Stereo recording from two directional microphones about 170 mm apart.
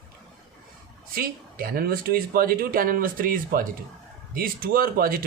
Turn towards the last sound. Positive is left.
turn(degrees=-60)  # may be behind; listen again after turning